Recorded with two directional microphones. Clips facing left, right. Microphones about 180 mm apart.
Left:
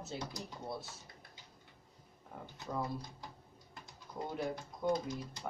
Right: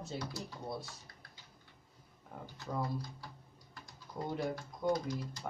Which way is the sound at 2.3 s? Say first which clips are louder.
Right 1 dB; centre (ahead or behind).